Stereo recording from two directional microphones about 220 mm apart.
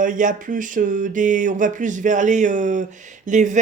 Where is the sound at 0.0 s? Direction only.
35° right (ahead or behind).